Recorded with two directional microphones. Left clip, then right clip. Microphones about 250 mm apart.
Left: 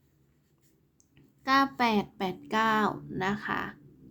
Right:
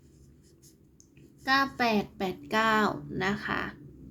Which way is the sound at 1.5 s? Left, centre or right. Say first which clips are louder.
Left 1 dB; centre.